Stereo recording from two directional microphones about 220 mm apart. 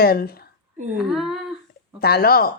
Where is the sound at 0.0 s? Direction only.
45° left (ahead or behind).